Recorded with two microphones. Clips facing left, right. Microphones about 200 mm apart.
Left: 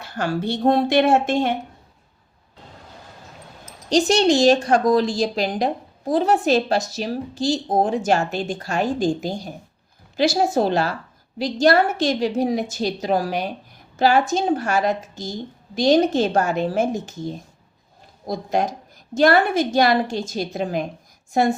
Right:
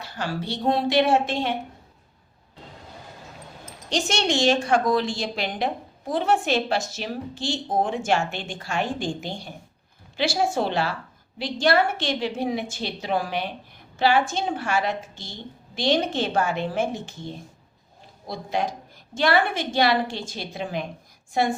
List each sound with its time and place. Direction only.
0.0 s a woman's voice: 50° left (ahead or behind)
3.8 s a woman's voice: 35° left (ahead or behind)